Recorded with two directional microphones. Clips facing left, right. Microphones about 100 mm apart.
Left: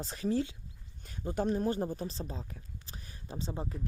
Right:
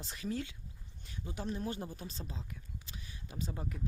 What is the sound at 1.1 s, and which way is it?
Speech, 45° left (ahead or behind).